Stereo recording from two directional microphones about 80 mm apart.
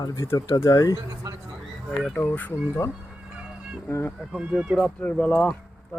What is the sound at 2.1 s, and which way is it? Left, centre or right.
Speech, left.